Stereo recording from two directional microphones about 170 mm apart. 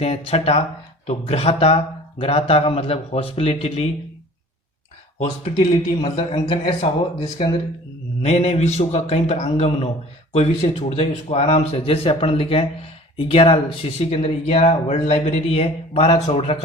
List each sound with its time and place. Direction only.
0.0 s speech: 35° left (ahead or behind)
5.2 s speech: 30° left (ahead or behind)